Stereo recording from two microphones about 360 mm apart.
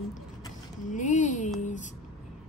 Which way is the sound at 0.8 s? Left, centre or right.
Left.